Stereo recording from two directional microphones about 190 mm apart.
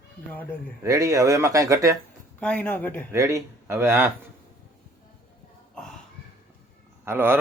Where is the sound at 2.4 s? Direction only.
10° left (ahead or behind).